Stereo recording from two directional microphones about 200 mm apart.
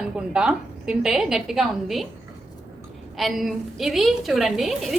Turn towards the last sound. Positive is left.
turn(degrees=0)  # may be behind; listen again after turning